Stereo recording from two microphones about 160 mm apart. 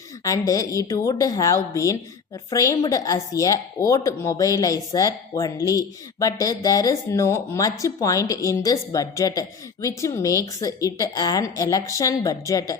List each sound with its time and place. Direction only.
0.3 s a woman's voice: 20° left (ahead or behind)